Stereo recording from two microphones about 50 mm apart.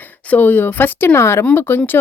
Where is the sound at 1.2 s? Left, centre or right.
Left.